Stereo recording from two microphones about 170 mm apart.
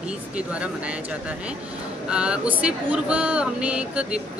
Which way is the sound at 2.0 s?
5° right (ahead or behind).